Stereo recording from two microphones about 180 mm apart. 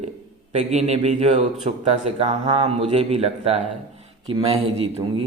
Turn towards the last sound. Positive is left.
turn(degrees=-30)  # may be behind; listen again after turning